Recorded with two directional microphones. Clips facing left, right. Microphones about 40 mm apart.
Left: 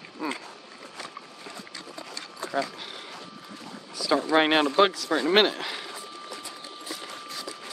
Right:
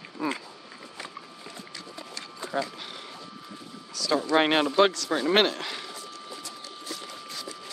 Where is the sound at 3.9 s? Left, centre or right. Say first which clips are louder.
Left 1 dB; centre.